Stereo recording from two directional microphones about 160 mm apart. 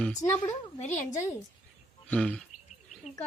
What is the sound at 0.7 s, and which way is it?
Speech, 45° left (ahead or behind).